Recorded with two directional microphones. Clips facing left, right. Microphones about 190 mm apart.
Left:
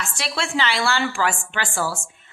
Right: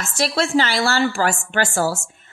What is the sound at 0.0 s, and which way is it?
Speech, 40° right (ahead or behind).